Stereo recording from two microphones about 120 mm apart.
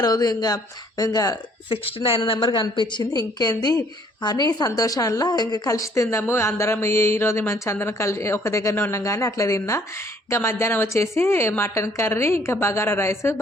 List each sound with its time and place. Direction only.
0.0 s a woman's voice: 35° left (ahead or behind)
1.7 s a woman's voice: 45° left (ahead or behind); by 13.3 s 20° left (ahead or behind)